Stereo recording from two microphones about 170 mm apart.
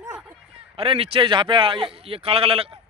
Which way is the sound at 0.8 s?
35° right (ahead or behind).